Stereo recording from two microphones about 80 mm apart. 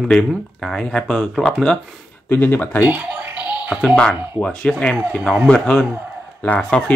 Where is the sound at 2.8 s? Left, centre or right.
Right.